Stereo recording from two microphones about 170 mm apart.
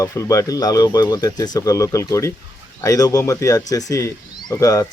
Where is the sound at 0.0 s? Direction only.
20° left (ahead or behind).